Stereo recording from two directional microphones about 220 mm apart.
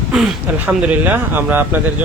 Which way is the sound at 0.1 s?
Centre (ahead or behind).